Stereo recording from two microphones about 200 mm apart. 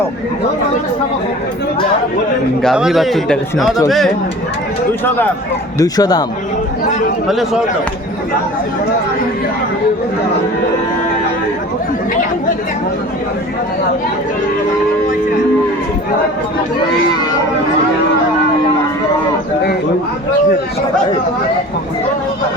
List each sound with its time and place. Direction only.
2.6 s speech: centre (ahead or behind); by 6.2 s 20° left (ahead or behind)
7.3 s speech: centre (ahead or behind)